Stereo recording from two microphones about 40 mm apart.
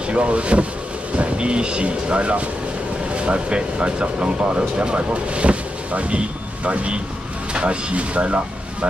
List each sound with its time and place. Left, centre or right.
0.1 s speech: right